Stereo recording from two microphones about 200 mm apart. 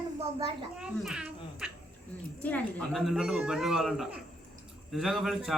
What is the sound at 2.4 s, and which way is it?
Speech, 5° left (ahead or behind).